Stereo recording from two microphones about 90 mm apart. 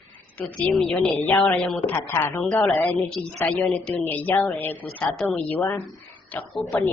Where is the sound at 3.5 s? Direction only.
10° left (ahead or behind).